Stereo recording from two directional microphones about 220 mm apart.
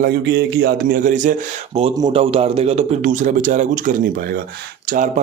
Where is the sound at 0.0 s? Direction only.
50° right (ahead or behind).